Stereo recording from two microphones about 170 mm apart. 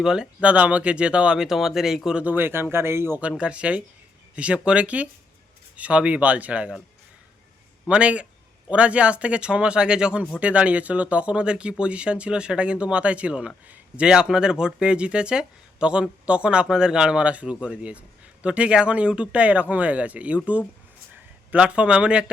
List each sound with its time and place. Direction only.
0.0 s speech: 5° right (ahead or behind)
7.9 s speech: 5° right (ahead or behind)